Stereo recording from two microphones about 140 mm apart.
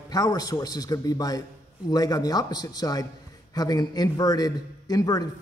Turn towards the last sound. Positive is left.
turn(degrees=25)  # may be behind; listen again after turning